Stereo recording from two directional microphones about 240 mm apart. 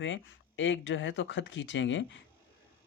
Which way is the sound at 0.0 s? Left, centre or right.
Left.